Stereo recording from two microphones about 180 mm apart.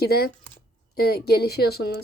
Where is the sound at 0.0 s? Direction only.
60° left (ahead or behind).